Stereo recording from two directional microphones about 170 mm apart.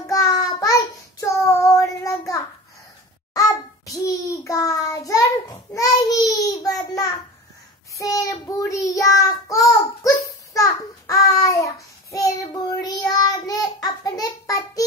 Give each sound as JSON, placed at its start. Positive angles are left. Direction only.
{"t": 0.0, "sound": "child singing", "side_deg": 20}